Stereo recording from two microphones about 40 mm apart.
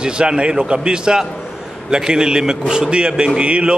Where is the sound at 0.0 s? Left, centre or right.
Right.